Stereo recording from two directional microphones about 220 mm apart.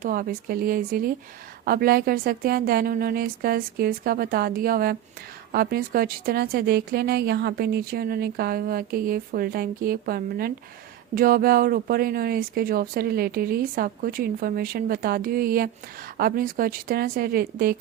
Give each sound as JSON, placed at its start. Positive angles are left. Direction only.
{"t": 0.0, "sound": "speech", "side_deg": -40}